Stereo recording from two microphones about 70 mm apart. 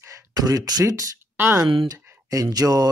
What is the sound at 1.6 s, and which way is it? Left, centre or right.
Speech, right.